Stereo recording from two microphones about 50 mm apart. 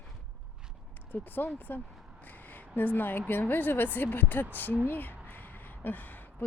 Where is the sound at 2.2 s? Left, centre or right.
Left.